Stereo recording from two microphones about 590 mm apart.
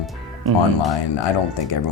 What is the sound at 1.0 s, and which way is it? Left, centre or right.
Speech, left.